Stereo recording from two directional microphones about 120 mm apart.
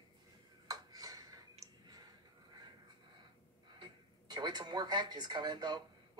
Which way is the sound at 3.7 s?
35° right (ahead or behind).